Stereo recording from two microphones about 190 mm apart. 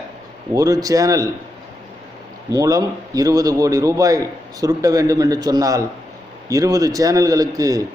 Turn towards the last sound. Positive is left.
turn(degrees=-20)  # may be behind; listen again after turning